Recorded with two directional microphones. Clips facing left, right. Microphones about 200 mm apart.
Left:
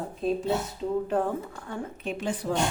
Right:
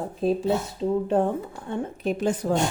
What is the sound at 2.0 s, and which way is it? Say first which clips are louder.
Speech: right 7 dB; 40° right (ahead or behind).